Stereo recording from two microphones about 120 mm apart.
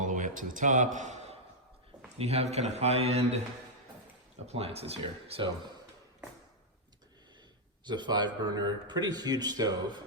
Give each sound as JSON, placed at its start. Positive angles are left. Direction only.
{"t": 0.0, "sound": "a sound", "side_deg": -90}
{"t": 2.1, "sound": "speech", "side_deg": -60}
{"t": 4.4, "sound": "speech", "side_deg": -60}
{"t": 7.9, "sound": "speech", "side_deg": -40}